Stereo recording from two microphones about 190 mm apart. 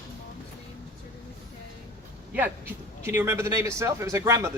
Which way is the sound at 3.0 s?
15° right (ahead or behind).